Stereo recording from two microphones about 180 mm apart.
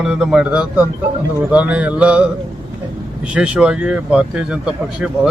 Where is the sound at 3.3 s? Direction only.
5° right (ahead or behind).